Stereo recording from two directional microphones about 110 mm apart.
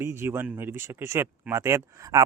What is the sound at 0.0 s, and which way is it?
Speech, 25° right (ahead or behind).